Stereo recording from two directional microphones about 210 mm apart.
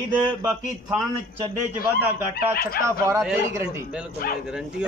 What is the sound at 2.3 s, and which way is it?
Speech, 45° left (ahead or behind).